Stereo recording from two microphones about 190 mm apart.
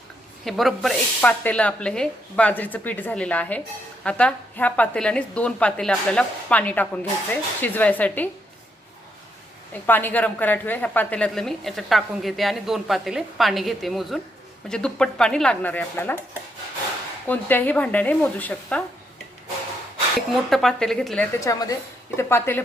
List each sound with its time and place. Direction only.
0.4 s a woman's voice: centre (ahead or behind)
9.8 s a woman's voice: 10° left (ahead or behind)
17.2 s speech: 10° left (ahead or behind)
20.3 s a woman's voice: centre (ahead or behind)
21.4 s speech: 15° left (ahead or behind)